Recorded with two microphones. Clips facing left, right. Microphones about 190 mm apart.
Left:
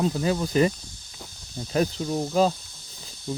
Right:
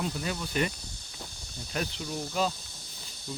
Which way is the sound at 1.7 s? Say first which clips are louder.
Left 10 dB; 35° left (ahead or behind).